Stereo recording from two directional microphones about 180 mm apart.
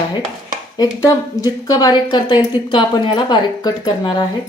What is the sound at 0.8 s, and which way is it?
A woman's voice, 20° left (ahead or behind).